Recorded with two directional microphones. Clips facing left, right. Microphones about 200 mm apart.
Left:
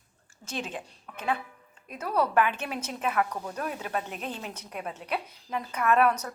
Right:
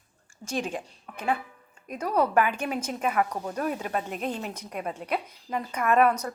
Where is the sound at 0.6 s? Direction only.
10° right (ahead or behind).